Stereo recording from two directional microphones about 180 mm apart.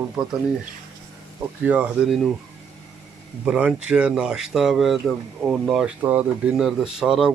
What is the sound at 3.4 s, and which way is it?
Speech, 5° right (ahead or behind).